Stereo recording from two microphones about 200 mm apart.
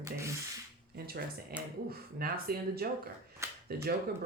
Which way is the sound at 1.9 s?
50° right (ahead or behind).